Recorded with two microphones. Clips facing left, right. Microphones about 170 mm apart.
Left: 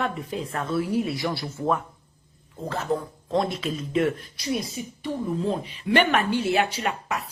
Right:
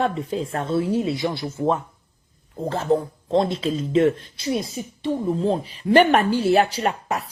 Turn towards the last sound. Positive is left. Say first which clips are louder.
# right 4 dB
turn(degrees=-35)  # may be behind; listen again after turning